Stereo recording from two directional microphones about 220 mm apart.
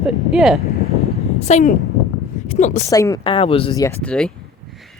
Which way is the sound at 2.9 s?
15° left (ahead or behind).